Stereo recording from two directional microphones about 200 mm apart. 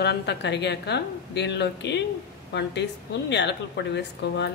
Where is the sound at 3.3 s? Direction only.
60° left (ahead or behind).